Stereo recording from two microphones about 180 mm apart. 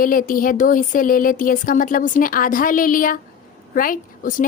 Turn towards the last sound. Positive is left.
turn(degrees=50)  # may be behind; listen again after turning